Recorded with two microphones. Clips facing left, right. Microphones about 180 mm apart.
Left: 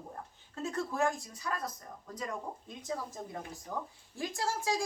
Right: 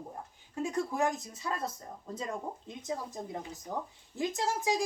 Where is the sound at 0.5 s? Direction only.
15° right (ahead or behind).